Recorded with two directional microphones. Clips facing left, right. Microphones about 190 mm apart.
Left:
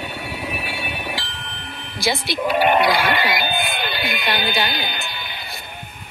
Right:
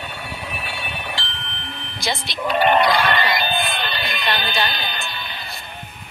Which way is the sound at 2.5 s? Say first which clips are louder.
Even; 10° left (ahead or behind).